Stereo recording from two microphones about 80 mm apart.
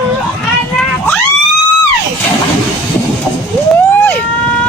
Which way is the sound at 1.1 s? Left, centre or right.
Left.